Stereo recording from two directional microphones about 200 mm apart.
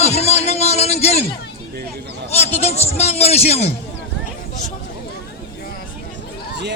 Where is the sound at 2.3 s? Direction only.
30° left (ahead or behind).